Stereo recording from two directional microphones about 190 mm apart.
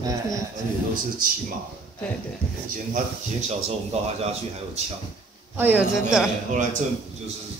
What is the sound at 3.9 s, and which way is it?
Speech, 35° right (ahead or behind).